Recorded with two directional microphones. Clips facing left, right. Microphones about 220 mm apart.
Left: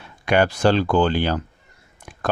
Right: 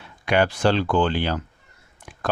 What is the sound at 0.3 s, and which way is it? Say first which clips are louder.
Speech: left 2 dB; 45° left (ahead or behind).